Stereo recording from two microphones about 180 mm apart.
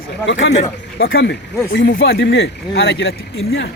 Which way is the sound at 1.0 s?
90° left.